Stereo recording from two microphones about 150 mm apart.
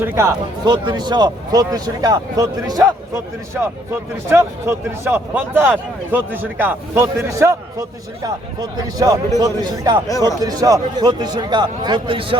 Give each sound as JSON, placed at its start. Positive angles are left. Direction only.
{"t": 0.0, "sound": "a man's voice", "side_deg": -15}
{"t": 4.3, "sound": "a man's voice", "side_deg": -15}
{"t": 10.1, "sound": "speech", "side_deg": 20}
{"t": 10.4, "sound": "a man's voice", "side_deg": -25}